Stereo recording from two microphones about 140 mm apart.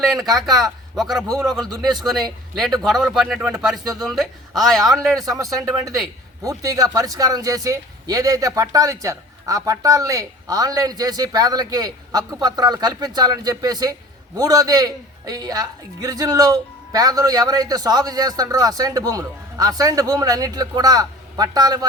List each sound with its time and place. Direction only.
0.0 s speech: centre (ahead or behind)
1.6 s speech: 30° right (ahead or behind)
2.0 s speech: centre (ahead or behind)
5.2 s speech: 25° right (ahead or behind)